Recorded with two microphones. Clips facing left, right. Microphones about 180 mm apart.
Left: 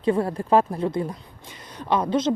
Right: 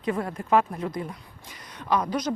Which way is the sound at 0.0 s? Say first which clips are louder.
Left 6 dB; 30° left (ahead or behind).